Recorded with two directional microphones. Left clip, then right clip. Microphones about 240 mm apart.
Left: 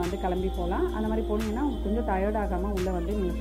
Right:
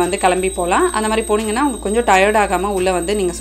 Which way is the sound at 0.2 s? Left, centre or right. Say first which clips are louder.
Right 14 dB; right.